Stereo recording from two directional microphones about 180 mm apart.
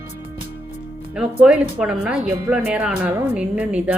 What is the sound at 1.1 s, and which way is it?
A woman's voice, 5° right (ahead or behind).